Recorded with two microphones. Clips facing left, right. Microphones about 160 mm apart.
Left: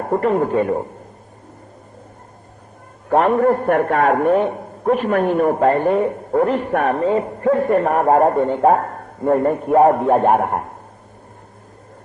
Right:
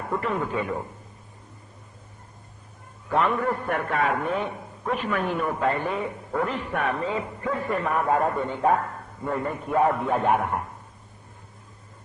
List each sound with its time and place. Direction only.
0.0 s a man's voice: 50° left (ahead or behind)
3.1 s a man's voice: 50° left (ahead or behind)